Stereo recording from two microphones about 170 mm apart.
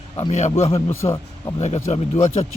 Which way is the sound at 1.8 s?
40° left (ahead or behind).